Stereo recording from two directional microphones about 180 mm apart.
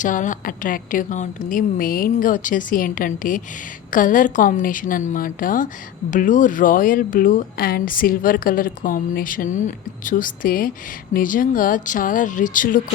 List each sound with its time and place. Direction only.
0.0 s a woman's voice: 45° left (ahead or behind)